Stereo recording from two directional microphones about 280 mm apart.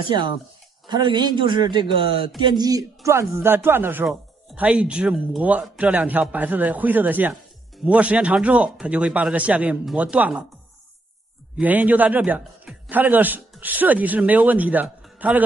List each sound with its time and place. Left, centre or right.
0.1 s a man's voice: centre
11.5 s a man's voice: centre